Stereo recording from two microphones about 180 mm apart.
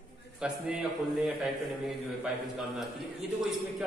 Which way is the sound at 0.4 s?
5° right (ahead or behind).